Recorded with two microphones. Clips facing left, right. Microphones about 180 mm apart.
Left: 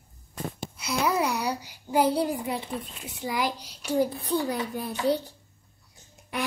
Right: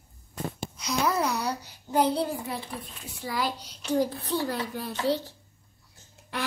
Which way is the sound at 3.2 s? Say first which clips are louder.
Left 2 dB; 15° left (ahead or behind).